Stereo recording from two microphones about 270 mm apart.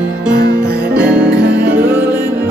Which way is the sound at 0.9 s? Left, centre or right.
Centre.